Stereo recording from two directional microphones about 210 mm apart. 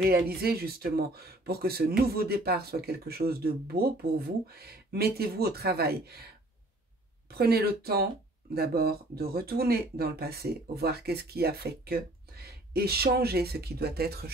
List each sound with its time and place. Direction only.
0.3 s speech: 45° right (ahead or behind)
7.2 s speech: 50° right (ahead or behind)